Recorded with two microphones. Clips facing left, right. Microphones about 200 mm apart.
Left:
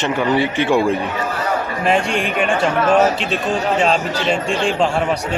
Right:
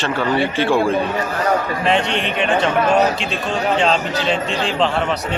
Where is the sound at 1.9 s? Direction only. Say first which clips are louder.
Left 2 dB; 10° left (ahead or behind).